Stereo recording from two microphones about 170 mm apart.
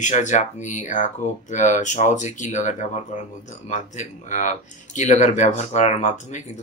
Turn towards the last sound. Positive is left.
turn(degrees=45)  # may be behind; listen again after turning